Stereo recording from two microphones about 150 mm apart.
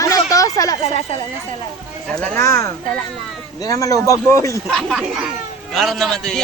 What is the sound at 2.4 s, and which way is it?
Speech, 20° left (ahead or behind).